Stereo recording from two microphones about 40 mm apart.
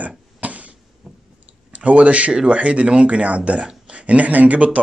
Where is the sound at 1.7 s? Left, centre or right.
Right.